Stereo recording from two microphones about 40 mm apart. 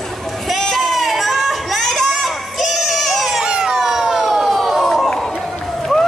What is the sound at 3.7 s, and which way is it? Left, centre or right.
Emergency vehicle, centre.